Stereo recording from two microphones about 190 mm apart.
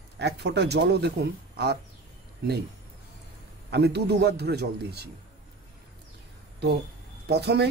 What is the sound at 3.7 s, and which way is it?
Speech, 60° right (ahead or behind).